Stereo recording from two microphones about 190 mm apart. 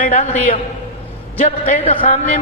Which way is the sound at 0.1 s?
35° left (ahead or behind).